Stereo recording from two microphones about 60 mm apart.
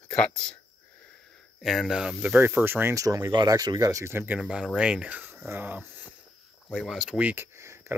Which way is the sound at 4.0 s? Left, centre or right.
Right.